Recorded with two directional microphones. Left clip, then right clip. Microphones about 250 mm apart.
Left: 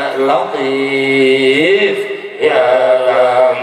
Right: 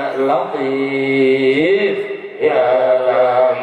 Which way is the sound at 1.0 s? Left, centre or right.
Centre.